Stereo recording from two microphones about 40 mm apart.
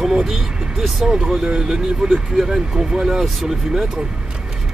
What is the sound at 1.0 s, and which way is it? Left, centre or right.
Speech, centre.